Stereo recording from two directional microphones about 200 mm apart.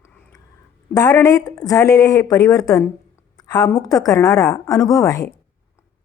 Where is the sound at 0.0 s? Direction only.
15° left (ahead or behind).